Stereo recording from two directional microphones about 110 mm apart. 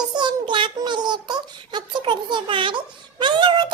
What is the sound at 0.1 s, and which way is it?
Child singing, 45° right (ahead or behind).